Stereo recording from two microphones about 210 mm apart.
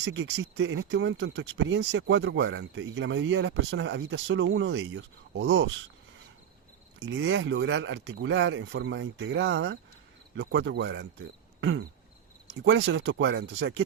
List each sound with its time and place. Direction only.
0.0 s speech: 60° right (ahead or behind)
7.0 s speech: 60° right (ahead or behind)
11.6 s a sound: 65° right (ahead or behind)
12.6 s speech: 60° right (ahead or behind)